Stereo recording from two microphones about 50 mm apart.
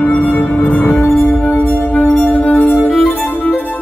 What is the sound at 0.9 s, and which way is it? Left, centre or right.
Music, left.